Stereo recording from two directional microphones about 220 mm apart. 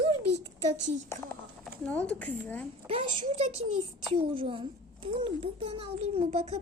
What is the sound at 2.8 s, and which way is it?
A child's voice, 25° right (ahead or behind).